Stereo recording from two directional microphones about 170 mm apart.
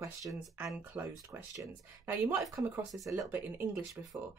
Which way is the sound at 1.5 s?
20° right (ahead or behind).